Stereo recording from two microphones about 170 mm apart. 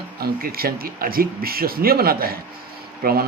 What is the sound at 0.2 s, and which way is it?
Speech, 60° right (ahead or behind).